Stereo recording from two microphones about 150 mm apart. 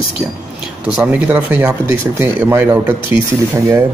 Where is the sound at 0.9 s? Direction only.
10° right (ahead or behind).